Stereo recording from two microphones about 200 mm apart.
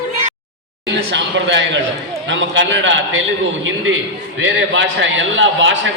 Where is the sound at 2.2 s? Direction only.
70° right (ahead or behind).